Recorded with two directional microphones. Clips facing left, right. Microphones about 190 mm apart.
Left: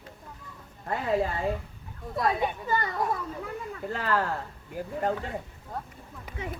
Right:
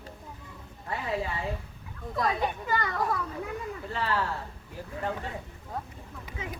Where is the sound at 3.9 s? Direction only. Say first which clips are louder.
Left 3 dB; 45° left (ahead or behind).